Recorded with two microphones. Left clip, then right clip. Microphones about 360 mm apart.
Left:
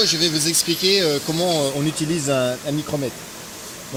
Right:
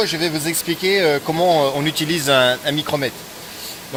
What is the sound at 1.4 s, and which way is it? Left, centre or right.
Speech, right.